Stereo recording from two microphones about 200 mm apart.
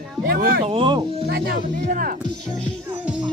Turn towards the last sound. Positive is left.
turn(degrees=-5)  # may be behind; listen again after turning